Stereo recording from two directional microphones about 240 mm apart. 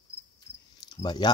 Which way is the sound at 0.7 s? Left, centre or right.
Centre.